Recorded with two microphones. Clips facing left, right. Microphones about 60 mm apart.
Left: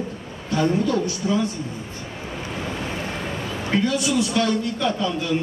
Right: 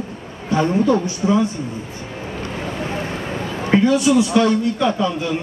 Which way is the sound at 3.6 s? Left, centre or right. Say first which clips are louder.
Right 7 dB; right.